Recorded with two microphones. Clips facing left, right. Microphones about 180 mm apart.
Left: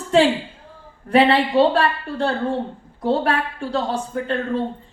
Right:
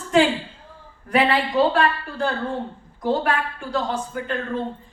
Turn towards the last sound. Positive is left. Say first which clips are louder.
# left 4 dB
turn(degrees=30)  # may be behind; listen again after turning